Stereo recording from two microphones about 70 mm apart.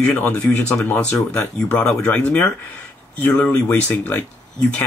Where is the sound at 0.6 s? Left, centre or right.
Left.